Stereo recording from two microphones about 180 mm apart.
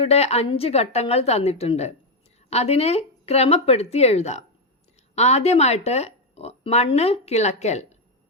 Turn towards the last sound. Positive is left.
turn(degrees=40)  # may be behind; listen again after turning